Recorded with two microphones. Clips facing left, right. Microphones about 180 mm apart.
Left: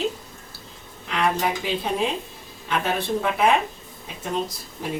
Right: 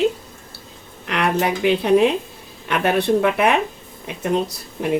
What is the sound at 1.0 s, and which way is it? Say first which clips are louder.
Speech: right 3 dB; 70° right (ahead or behind).